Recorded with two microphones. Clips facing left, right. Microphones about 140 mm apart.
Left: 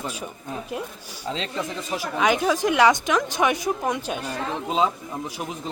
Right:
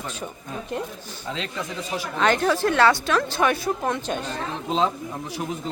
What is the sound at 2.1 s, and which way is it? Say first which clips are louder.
Speech: even; 10° left (ahead or behind).